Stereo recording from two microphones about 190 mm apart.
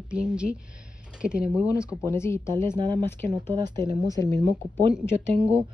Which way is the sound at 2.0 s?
15° left (ahead or behind).